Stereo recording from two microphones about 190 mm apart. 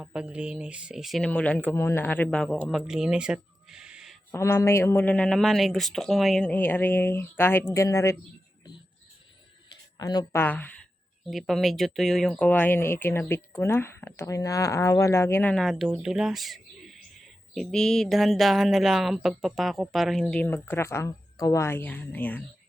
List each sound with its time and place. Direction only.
0.0 s speech: 5° right (ahead or behind)
4.3 s speech: 15° left (ahead or behind)
9.6 s a sound: 20° left (ahead or behind)
10.4 s speech: 10° left (ahead or behind)
15.7 s speech: 5° right (ahead or behind)